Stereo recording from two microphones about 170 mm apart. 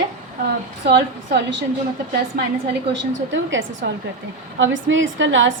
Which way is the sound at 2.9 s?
90° right.